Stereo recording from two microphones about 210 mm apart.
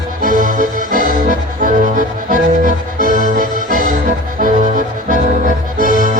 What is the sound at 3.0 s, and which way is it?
Music, 40° right (ahead or behind).